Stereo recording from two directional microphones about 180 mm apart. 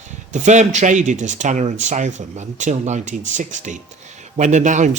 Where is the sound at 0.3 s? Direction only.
40° right (ahead or behind).